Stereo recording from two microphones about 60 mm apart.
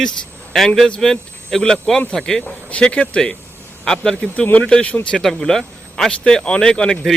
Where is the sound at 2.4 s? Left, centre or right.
Left.